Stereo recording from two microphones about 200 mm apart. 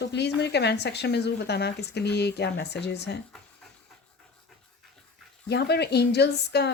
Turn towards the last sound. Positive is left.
turn(degrees=55)  # may be behind; listen again after turning